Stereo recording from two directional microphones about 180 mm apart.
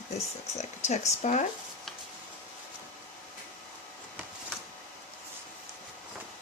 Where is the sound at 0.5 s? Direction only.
40° left (ahead or behind).